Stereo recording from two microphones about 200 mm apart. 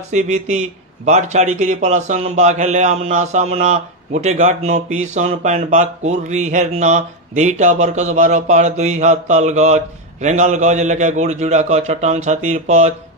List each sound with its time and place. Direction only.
0.1 s speech: 35° right (ahead or behind)